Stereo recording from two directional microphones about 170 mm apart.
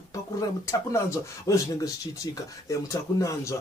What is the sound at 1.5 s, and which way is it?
Speech, 20° left (ahead or behind).